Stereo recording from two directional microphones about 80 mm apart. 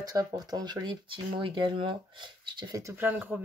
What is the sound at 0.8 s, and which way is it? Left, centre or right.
Speech, right.